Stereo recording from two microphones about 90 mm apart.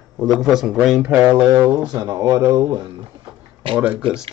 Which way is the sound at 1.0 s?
15° right (ahead or behind).